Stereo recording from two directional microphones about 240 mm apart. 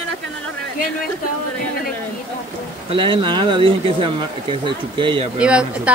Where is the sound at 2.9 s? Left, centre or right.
Right.